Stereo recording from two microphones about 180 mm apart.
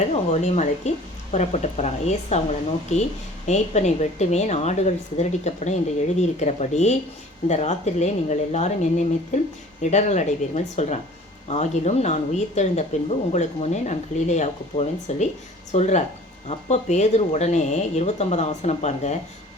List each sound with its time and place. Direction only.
0.1 s speech: 35° left (ahead or behind)